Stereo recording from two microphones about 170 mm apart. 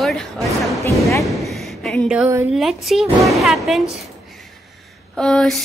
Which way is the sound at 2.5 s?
Centre (ahead or behind).